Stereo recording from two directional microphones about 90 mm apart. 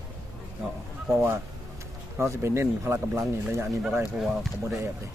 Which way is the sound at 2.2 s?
30° right (ahead or behind).